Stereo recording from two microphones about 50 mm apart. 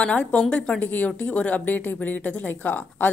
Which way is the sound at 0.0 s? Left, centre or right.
Left.